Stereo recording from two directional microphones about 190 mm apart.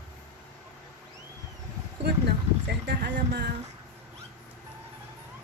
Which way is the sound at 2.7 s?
55° right (ahead or behind).